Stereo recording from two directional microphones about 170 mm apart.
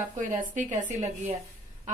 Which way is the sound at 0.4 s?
50° right (ahead or behind).